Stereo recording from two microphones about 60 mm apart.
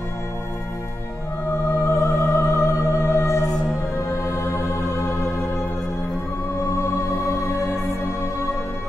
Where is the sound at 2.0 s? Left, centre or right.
Left.